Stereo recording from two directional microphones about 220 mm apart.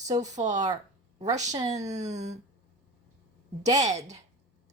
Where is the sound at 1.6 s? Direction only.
30° right (ahead or behind).